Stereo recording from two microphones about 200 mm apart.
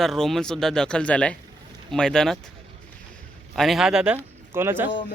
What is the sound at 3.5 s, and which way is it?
Speech, centre (ahead or behind).